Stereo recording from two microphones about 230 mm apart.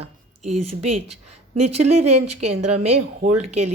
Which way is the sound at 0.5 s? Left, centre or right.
Right.